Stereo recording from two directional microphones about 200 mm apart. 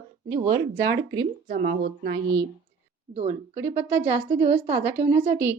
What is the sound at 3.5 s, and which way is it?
Speech, 10° right (ahead or behind).